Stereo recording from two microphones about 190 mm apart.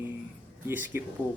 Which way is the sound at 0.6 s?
10° right (ahead or behind).